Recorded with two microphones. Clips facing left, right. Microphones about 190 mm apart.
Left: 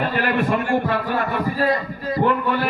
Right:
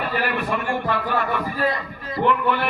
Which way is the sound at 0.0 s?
45° left (ahead or behind).